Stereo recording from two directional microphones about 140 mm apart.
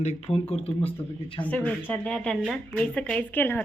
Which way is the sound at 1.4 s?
10° left (ahead or behind).